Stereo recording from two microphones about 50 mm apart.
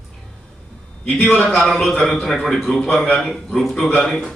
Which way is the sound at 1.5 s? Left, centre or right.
Centre.